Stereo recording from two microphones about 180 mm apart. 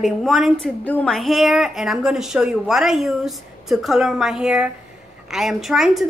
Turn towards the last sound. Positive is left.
turn(degrees=0)  # may be behind; listen again after turning